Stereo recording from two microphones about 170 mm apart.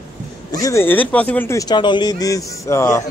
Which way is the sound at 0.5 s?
20° left (ahead or behind).